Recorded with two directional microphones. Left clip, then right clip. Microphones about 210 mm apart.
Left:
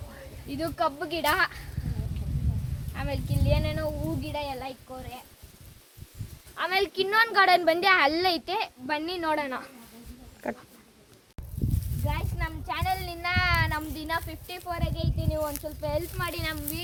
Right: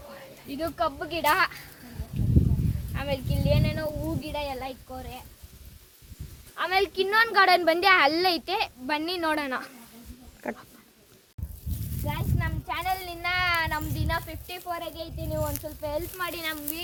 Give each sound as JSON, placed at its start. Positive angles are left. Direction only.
{"t": 0.4, "sound": "speech", "side_deg": -5}
{"t": 2.9, "sound": "speech", "side_deg": -30}
{"t": 6.6, "sound": "speech", "side_deg": -10}
{"t": 8.4, "sound": "a child's voice", "side_deg": -45}
{"t": 8.9, "sound": "a woman's voice", "side_deg": -60}
{"t": 10.4, "sound": "speech", "side_deg": 0}
{"t": 12.0, "sound": "speech", "side_deg": 0}